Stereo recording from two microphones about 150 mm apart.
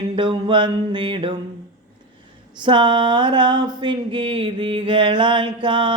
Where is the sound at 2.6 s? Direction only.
30° right (ahead or behind).